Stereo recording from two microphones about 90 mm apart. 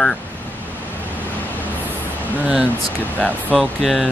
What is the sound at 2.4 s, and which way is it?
Speech, 15° right (ahead or behind).